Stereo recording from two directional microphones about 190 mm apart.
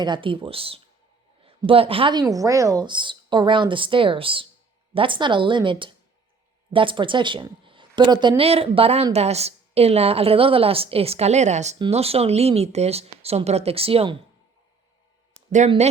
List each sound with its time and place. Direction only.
0.0 s a woman's voice: 25° right (ahead or behind)
15.4 s speech: 40° right (ahead or behind)